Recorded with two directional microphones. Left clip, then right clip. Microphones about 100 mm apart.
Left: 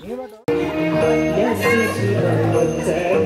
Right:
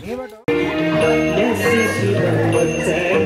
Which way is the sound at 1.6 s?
25° right (ahead or behind).